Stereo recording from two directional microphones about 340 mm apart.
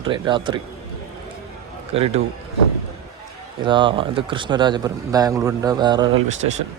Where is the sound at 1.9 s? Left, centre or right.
Centre.